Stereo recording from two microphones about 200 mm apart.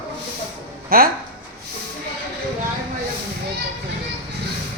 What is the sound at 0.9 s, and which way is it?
Speech, 45° right (ahead or behind).